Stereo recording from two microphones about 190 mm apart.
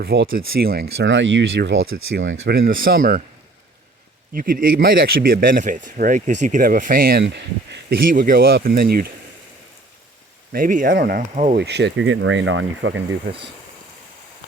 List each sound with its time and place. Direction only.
0.0 s speech: 55° right (ahead or behind)
1.0 s speech: 75° right (ahead or behind)
2.4 s speech: 55° right (ahead or behind)
4.4 s speech: 50° right (ahead or behind)
10.5 s speech: 45° right (ahead or behind); by 13.0 s 85° right